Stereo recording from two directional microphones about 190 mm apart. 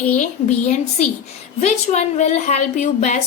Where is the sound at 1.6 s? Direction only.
35° left (ahead or behind).